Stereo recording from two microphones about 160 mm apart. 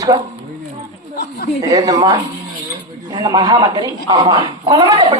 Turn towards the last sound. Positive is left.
turn(degrees=-25)  # may be behind; listen again after turning